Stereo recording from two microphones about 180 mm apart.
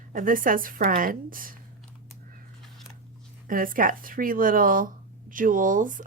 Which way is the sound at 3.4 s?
50° right (ahead or behind).